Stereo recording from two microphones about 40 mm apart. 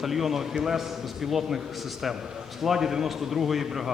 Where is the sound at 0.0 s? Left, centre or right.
Centre.